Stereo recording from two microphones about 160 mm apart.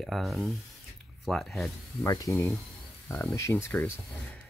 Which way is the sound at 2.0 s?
20° left (ahead or behind).